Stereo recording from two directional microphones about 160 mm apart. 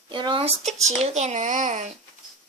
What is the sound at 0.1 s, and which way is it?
Speech, 30° right (ahead or behind).